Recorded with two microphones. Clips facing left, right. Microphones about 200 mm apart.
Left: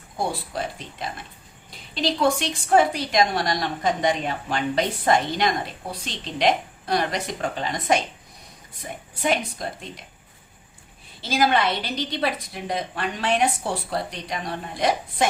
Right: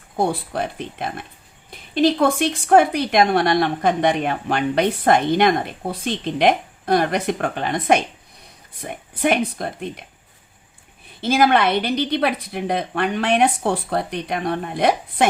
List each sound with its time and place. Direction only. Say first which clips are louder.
0.2 s a woman's voice: right 6 dB; 60° right (ahead or behind)
11.2 s a woman's voice: right 5 dB; 55° right (ahead or behind)